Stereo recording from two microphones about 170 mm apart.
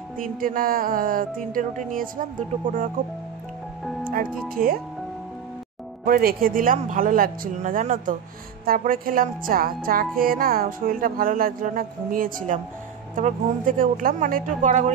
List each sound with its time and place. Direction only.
0.2 s speech: 55° right (ahead or behind)
4.1 s speech: 55° right (ahead or behind)
6.0 s speech: 55° right (ahead or behind)